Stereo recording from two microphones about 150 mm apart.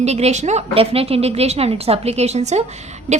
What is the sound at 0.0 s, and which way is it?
A woman's voice, 45° right (ahead or behind).